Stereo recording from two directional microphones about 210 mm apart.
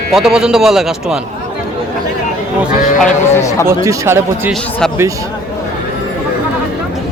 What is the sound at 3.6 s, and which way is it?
Speech, 10° right (ahead or behind).